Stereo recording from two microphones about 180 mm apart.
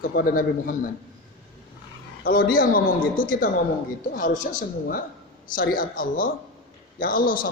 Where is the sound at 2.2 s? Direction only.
50° left (ahead or behind).